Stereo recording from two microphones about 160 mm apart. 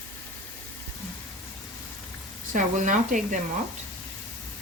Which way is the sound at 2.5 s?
50° right (ahead or behind).